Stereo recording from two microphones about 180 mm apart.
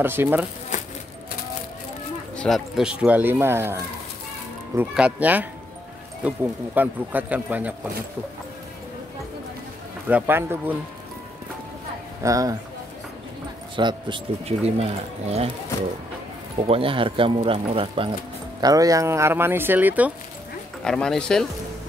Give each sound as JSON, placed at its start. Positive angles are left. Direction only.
{"t": 0.0, "sound": "speech", "side_deg": -10}
{"t": 2.3, "sound": "speech", "side_deg": 5}
{"t": 10.0, "sound": "speech", "side_deg": -10}
{"t": 12.2, "sound": "speech", "side_deg": -20}
{"t": 13.7, "sound": "speech", "side_deg": -25}
{"t": 16.5, "sound": "speech", "side_deg": -30}
{"t": 18.6, "sound": "speech", "side_deg": -20}
{"t": 20.8, "sound": "speech", "side_deg": 5}